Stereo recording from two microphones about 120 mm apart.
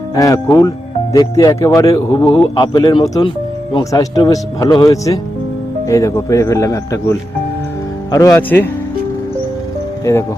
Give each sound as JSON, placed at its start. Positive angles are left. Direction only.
{"t": 0.2, "sound": "speech", "side_deg": 30}
{"t": 2.3, "sound": "speech", "side_deg": 40}
{"t": 8.4, "sound": "speech", "side_deg": 15}
{"t": 10.0, "sound": "speech", "side_deg": 25}